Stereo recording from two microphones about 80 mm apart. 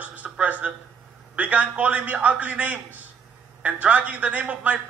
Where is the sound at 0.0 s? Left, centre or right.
Centre.